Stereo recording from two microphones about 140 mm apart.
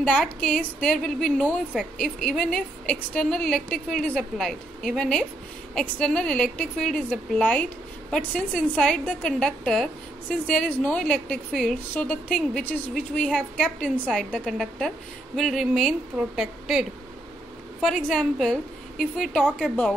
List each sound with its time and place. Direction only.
0.0 s a woman's voice: 10° left (ahead or behind)